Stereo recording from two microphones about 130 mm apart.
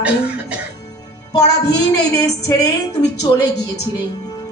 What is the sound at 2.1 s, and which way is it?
A woman's voice, 25° left (ahead or behind).